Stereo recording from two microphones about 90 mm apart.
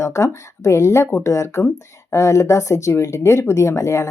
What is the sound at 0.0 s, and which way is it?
Speech, 35° left (ahead or behind).